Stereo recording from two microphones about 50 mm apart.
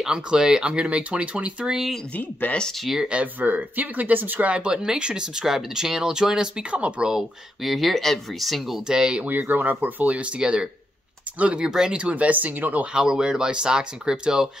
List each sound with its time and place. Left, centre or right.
0.0 s speech: centre
1.7 s speech: centre
3.0 s speech: right
3.3 s speech: right; by 7.2 s centre
7.6 s speech: centre
8.8 s speech: centre
9.2 s speech: right
10.0 s speech: right
12.9 s speech: centre